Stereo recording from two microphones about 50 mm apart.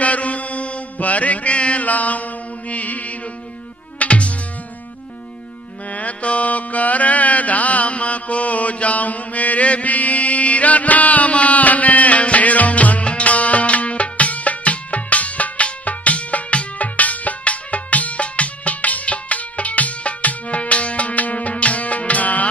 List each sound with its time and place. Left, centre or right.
0.0 s music: left
5.9 s music: left